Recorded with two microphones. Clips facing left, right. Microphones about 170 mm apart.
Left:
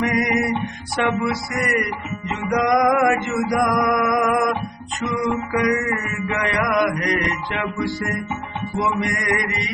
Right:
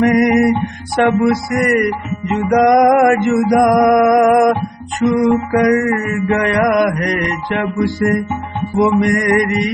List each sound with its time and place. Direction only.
0.0 s music: 55° right (ahead or behind)
5.6 s music: 45° right (ahead or behind)